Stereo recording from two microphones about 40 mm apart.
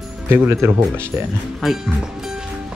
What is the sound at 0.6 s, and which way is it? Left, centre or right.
Speech, right.